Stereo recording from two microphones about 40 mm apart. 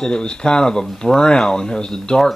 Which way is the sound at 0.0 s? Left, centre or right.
Left.